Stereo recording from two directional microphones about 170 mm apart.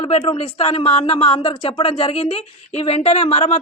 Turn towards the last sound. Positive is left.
turn(degrees=40)  # may be behind; listen again after turning